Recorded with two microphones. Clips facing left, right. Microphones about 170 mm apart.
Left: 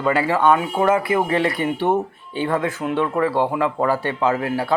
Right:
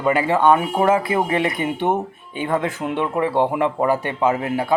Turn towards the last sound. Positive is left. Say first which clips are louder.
# right 1 dB
turn(degrees=-20)  # may be behind; listen again after turning